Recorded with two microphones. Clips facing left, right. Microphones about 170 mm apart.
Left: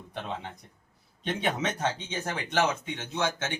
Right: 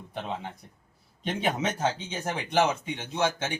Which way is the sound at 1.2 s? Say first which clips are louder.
Right 1 dB; 10° right (ahead or behind).